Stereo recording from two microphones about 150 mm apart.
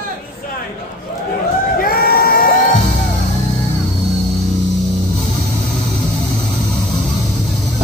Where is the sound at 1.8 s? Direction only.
90° left.